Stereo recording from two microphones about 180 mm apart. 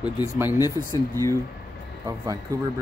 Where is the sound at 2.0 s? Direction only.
20° right (ahead or behind).